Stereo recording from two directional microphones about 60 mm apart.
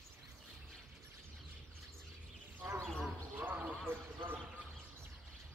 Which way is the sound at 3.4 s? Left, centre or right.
Right.